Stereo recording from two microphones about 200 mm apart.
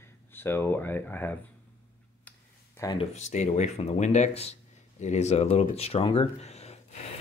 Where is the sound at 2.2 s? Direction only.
10° left (ahead or behind).